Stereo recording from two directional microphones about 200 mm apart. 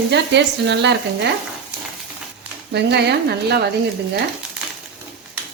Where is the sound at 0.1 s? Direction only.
60° right (ahead or behind).